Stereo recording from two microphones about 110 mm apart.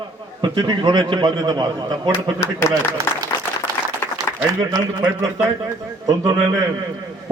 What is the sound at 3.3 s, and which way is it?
Applause, 45° left (ahead or behind).